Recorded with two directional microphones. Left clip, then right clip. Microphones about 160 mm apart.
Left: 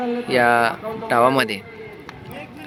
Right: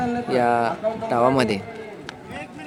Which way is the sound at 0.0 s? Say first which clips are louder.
Left 3 dB; 10° right (ahead or behind).